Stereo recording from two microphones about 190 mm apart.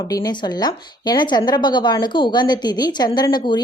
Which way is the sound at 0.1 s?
20° left (ahead or behind).